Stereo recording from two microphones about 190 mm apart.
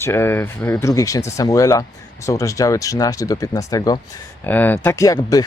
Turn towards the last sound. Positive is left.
turn(degrees=20)  # may be behind; listen again after turning